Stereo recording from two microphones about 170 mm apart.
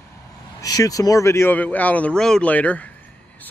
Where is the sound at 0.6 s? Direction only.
20° left (ahead or behind).